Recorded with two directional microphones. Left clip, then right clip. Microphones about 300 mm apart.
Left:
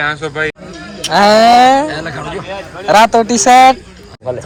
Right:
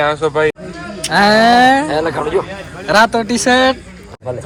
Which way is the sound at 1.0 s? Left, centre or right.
Centre.